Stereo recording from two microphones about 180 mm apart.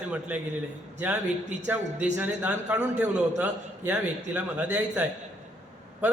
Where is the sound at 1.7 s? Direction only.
10° right (ahead or behind).